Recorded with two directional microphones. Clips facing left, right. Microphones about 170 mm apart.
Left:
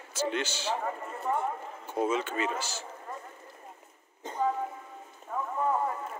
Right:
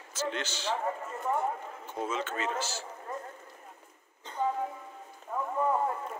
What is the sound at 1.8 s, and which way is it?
A man's voice, 10° left (ahead or behind).